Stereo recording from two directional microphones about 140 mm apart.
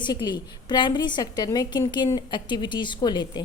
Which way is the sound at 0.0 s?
30° left (ahead or behind).